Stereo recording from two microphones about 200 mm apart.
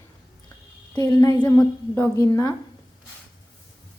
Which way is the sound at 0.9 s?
15° left (ahead or behind).